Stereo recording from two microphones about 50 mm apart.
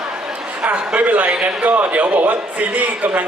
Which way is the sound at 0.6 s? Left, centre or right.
Right.